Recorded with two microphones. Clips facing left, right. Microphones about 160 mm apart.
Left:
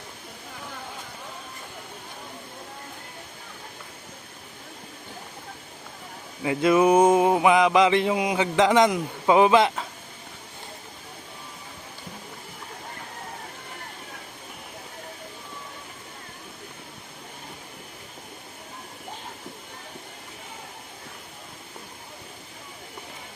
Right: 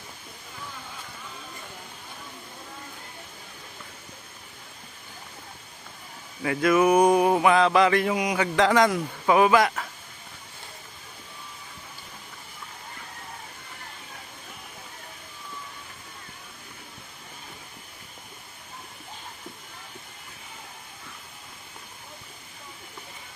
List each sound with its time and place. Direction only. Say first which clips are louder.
6.4 s mantra: left 1 dB; 20° left (ahead or behind)